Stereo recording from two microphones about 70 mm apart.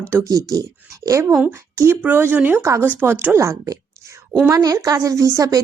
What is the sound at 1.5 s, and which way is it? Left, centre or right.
Speech, right.